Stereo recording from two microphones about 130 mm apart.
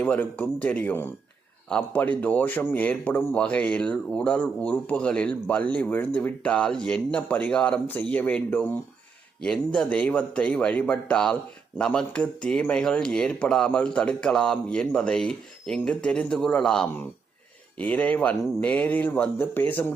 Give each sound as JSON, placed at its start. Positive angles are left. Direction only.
{"t": 0.0, "sound": "a man's voice", "side_deg": 10}